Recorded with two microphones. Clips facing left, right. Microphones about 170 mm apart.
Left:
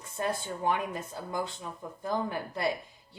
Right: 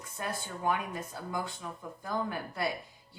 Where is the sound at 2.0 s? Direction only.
25° left (ahead or behind).